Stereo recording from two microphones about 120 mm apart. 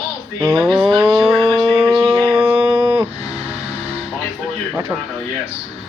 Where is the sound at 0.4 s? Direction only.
5° right (ahead or behind).